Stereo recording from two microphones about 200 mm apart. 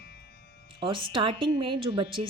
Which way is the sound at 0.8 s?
25° right (ahead or behind).